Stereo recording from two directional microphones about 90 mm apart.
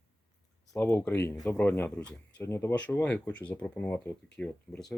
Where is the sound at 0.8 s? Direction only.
25° left (ahead or behind).